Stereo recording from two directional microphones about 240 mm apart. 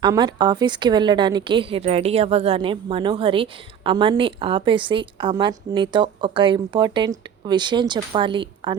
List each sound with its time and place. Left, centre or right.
0.0 s a woman's voice: centre